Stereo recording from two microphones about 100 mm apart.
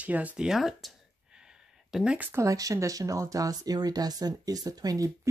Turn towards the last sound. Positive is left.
turn(degrees=-35)  # may be behind; listen again after turning